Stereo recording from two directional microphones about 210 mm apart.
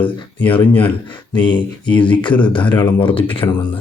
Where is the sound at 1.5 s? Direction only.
20° left (ahead or behind).